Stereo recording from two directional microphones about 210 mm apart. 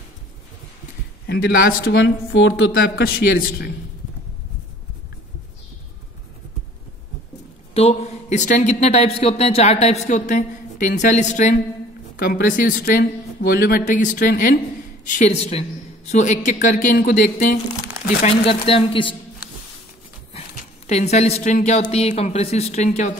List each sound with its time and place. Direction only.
1.2 s speech: 50° left (ahead or behind)
2.7 s speech: 45° left (ahead or behind)
7.7 s speech: 30° left (ahead or behind)
18.5 s speech: 25° left (ahead or behind)
20.3 s a woman's voice: 30° left (ahead or behind)